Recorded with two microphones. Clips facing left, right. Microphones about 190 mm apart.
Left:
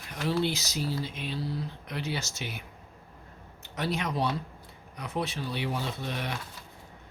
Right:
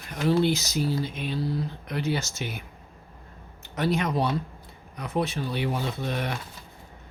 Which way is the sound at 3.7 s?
50° right (ahead or behind).